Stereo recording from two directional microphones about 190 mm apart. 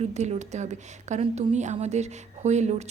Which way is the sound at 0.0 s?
35° right (ahead or behind).